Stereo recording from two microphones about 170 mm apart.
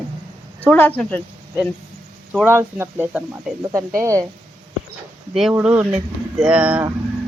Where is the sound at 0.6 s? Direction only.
10° left (ahead or behind).